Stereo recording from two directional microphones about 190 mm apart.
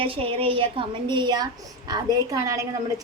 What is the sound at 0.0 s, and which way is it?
Speech, 30° right (ahead or behind).